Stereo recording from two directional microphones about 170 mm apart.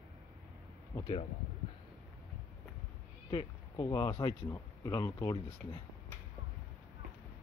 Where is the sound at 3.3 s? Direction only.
25° left (ahead or behind).